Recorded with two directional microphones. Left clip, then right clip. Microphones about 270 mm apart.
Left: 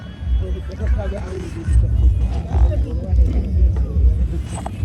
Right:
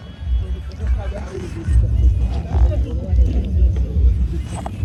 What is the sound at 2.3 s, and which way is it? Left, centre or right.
Music, centre.